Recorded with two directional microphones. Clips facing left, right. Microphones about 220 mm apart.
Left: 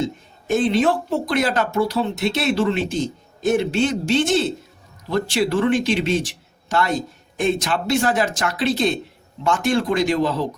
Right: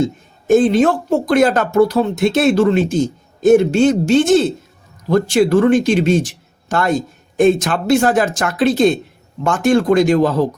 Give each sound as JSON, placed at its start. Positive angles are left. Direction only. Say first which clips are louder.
{"t": 0.0, "sound": "speech", "louder": "right 6 dB", "side_deg": -45}